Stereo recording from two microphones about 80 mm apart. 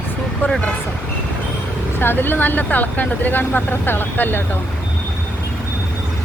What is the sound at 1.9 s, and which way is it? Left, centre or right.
Speech, left.